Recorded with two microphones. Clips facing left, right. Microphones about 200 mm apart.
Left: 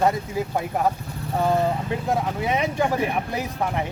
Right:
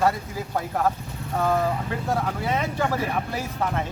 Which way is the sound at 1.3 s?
20° left (ahead or behind).